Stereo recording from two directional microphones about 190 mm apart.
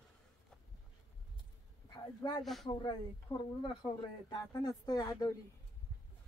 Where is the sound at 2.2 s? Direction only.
20° left (ahead or behind).